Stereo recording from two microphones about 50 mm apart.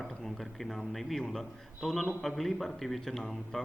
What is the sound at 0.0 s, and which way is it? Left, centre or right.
A man's voice, centre.